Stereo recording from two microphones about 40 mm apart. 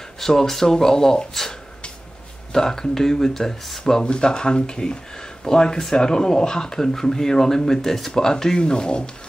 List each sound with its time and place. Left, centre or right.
0.2 s speech: centre
2.5 s speech: centre